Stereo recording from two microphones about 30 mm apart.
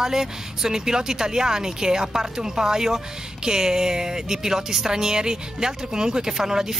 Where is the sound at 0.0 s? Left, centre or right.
Centre.